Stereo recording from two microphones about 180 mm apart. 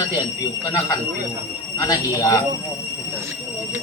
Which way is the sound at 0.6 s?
20° left (ahead or behind).